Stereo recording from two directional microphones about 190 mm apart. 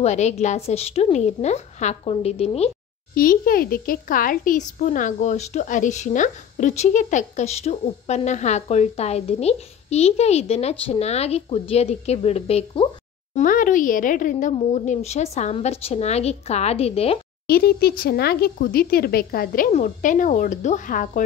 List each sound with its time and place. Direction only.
0.0 s a woman's voice: 35° left (ahead or behind)
3.2 s a woman's voice: 50° left (ahead or behind); by 12.8 s 30° left (ahead or behind)
13.3 s a woman's voice: 45° left (ahead or behind)
17.5 s speech: 55° left (ahead or behind)